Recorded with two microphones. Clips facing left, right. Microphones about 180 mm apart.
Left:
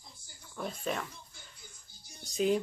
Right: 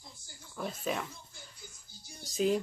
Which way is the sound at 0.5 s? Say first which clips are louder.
Right 1 dB; centre (ahead or behind).